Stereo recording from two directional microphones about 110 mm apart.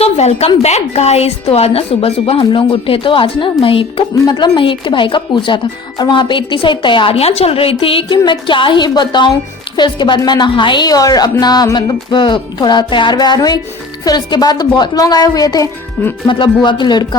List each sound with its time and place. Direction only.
0.0 s a woman's voice: 80° left; by 4.0 s 55° left (ahead or behind)
4.3 s a woman's voice: 40° left (ahead or behind)
16.2 s a woman's voice: 45° left (ahead or behind)